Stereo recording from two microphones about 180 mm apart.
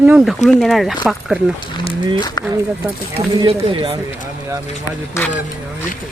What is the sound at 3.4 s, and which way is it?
Speech, 30° right (ahead or behind).